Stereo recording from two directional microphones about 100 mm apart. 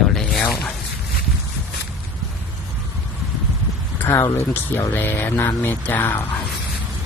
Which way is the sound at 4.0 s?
30° left (ahead or behind).